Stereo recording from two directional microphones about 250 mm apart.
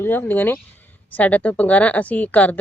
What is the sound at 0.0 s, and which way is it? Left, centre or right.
Speech, centre.